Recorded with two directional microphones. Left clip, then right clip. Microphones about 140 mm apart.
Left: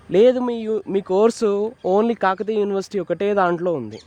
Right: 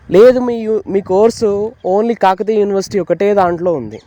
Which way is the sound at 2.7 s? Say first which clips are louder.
Right 8 dB; 40° right (ahead or behind).